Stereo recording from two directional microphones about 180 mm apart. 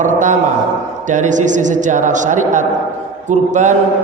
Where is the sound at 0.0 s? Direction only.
45° right (ahead or behind).